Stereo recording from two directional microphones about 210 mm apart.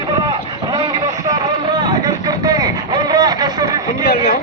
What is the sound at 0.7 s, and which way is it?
Vehicle, 20° right (ahead or behind).